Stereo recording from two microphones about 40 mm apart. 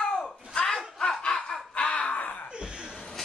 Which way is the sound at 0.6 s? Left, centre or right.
Centre.